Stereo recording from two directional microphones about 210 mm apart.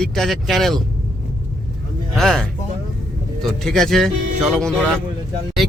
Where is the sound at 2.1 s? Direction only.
Centre (ahead or behind).